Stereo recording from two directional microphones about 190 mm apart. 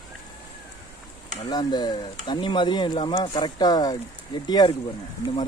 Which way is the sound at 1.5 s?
20° left (ahead or behind).